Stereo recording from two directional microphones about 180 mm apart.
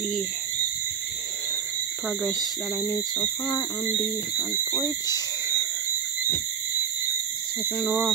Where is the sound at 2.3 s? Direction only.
15° left (ahead or behind).